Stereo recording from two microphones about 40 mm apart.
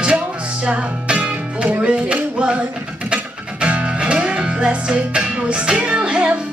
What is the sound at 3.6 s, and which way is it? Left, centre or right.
Music, right.